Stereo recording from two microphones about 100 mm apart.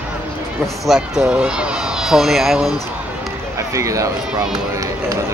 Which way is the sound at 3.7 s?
30° right (ahead or behind).